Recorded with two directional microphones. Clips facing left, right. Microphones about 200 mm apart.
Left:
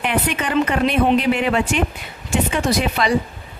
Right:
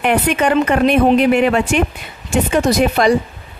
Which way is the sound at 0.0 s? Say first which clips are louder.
Right 6 dB; 50° right (ahead or behind).